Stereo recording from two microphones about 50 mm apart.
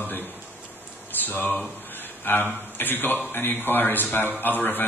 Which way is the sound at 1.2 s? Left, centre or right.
Left.